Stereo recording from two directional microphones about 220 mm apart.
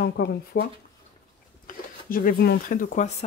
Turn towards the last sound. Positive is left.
turn(degrees=35)  # may be behind; listen again after turning